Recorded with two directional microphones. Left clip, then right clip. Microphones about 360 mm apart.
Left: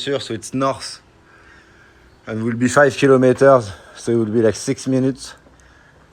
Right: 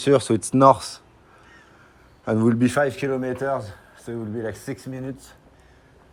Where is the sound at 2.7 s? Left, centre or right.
Centre.